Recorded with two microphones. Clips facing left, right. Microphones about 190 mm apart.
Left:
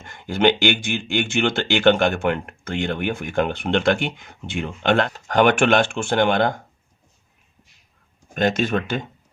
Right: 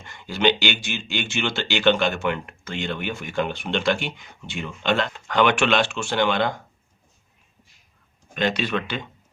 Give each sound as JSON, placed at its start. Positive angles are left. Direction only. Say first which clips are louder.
{"t": 0.0, "sound": "speech", "louder": "left 3 dB", "side_deg": 50}
{"t": 5.1, "sound": "speech", "louder": "left 3 dB", "side_deg": 45}
{"t": 8.3, "sound": "speech", "louder": "left 4 dB", "side_deg": 45}